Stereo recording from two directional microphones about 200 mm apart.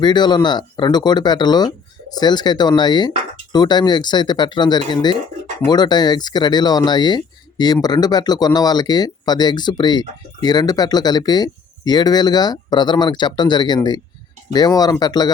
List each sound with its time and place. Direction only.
0.0 s speech: 20° left (ahead or behind)